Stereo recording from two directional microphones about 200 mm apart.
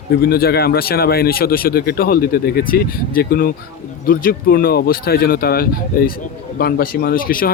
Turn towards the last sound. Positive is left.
turn(degrees=45)  # may be behind; listen again after turning